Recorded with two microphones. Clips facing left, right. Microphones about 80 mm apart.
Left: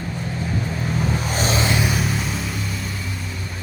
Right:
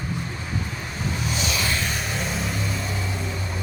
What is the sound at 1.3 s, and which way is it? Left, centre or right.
Vehicle, left.